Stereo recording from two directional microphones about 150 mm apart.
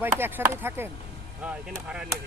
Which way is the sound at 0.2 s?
15° right (ahead or behind).